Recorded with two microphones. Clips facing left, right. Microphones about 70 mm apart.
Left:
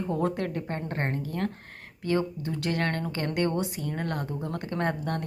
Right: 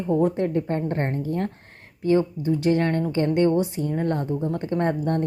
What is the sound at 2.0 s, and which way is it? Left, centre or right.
Speech, right.